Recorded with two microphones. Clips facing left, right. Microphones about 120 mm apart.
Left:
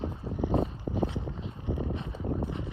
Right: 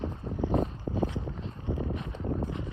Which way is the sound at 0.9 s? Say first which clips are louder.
Even; 20° left (ahead or behind).